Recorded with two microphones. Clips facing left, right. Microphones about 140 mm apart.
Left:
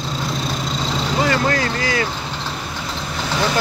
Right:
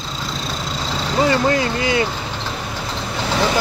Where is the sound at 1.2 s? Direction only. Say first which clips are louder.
Right 3 dB; 20° right (ahead or behind).